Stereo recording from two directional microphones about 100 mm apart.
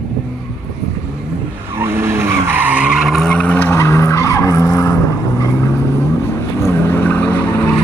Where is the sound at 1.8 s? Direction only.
25° right (ahead or behind); by 3.2 s 5° right (ahead or behind).